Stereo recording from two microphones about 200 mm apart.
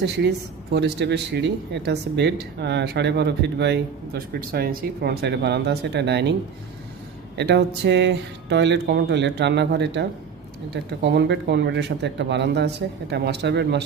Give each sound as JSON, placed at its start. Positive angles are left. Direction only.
{"t": 0.0, "sound": "speech", "side_deg": -60}
{"t": 7.3, "sound": "speech", "side_deg": -60}